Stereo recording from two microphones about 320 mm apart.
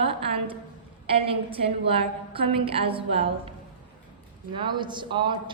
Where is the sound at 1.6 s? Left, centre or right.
Centre.